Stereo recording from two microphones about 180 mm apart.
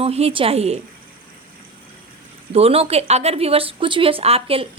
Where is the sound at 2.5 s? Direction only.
35° right (ahead or behind).